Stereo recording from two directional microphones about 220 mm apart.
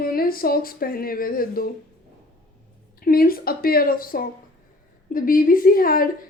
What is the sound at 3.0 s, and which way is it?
A woman's voice, 40° left (ahead or behind).